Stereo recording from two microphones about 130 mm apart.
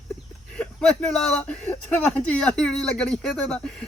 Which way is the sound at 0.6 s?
5° left (ahead or behind).